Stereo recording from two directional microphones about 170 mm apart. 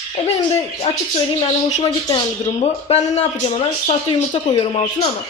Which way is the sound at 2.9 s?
40° left (ahead or behind).